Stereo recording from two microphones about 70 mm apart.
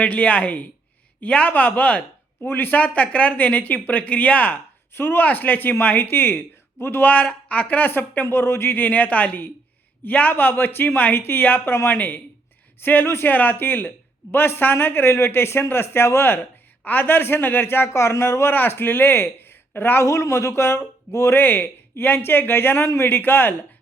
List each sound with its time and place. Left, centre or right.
0.0 s a man's voice: centre
7.1 s speech: centre
13.1 s a man's voice: left
13.3 s a man's voice: left
20.1 s a man's voice: left
21.3 s a man's voice: left